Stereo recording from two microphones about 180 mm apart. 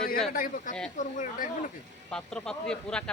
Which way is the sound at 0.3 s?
45° left (ahead or behind).